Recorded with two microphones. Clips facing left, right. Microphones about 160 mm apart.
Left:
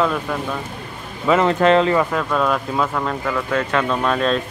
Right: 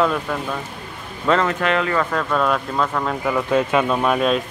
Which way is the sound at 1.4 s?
30° left (ahead or behind).